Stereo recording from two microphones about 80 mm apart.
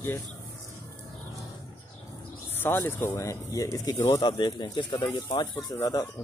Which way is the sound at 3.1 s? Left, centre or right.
Left.